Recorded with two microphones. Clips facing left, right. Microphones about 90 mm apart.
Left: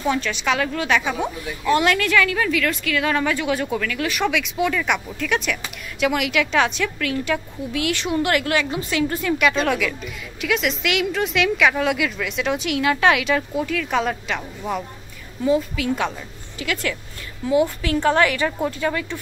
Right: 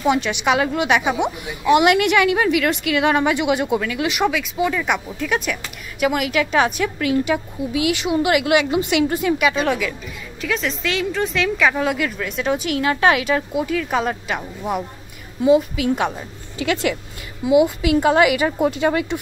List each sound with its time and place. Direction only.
0.0 s a woman's voice: 15° right (ahead or behind)
4.3 s a woman's voice: 5° right (ahead or behind)
9.4 s a woman's voice: 5° right (ahead or behind)
16.5 s speech: 25° right (ahead or behind)
17.5 s a woman's voice: 15° right (ahead or behind)